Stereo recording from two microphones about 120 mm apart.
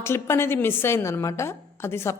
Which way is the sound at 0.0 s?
20° left (ahead or behind).